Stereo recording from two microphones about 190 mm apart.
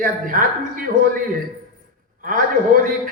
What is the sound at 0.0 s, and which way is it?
Speech, 45° right (ahead or behind).